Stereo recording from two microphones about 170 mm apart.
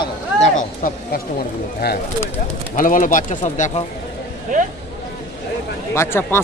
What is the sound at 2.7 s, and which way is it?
Speech, 50° left (ahead or behind).